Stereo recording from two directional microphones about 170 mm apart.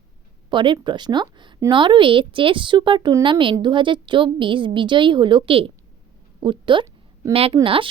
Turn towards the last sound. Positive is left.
turn(degrees=-30)  # may be behind; listen again after turning